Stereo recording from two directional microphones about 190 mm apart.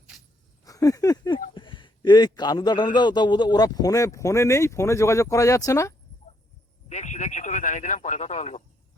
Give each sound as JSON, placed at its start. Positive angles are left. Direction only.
{"t": 0.6, "sound": "a sound", "side_deg": 20}
{"t": 1.5, "sound": "a man's voice", "side_deg": 25}
{"t": 6.8, "sound": "speech", "side_deg": 40}